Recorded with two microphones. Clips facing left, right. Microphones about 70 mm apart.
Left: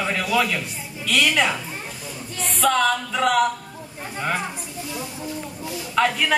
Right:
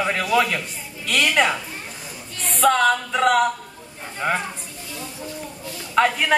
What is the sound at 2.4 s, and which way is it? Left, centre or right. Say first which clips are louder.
Music: right 3 dB; centre.